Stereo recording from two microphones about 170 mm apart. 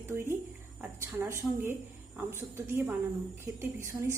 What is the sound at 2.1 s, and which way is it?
Speech, 10° right (ahead or behind).